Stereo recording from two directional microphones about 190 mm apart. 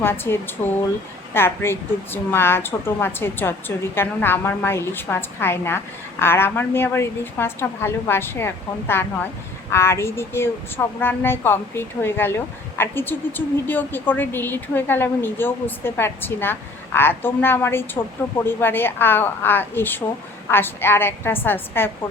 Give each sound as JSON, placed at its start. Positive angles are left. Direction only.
{"t": 0.0, "sound": "a woman's voice", "side_deg": 10}